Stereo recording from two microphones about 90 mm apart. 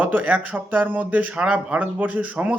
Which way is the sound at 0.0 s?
15° right (ahead or behind).